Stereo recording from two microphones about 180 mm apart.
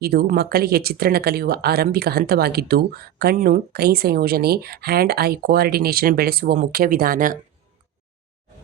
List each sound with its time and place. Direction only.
0.0 s speech: 60° right (ahead or behind)